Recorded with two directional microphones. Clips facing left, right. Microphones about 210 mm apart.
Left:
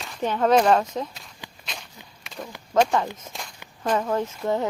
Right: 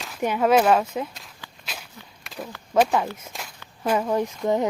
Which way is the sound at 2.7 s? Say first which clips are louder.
Even; 5° right (ahead or behind).